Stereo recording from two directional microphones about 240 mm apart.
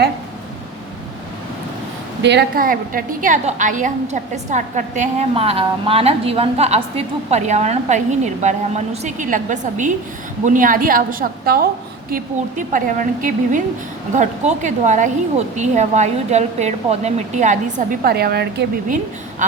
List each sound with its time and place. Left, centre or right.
2.2 s a woman's voice: right
19.4 s a woman's voice: right